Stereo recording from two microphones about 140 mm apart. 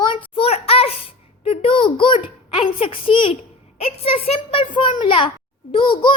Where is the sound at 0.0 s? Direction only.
35° left (ahead or behind).